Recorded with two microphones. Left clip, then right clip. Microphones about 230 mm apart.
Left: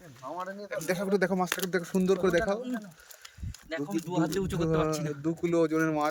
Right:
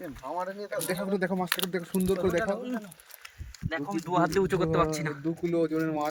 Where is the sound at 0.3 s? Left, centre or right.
Right.